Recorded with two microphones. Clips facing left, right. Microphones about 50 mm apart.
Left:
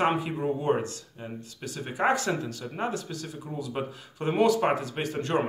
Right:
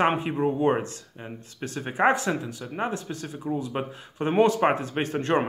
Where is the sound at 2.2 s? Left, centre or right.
Centre.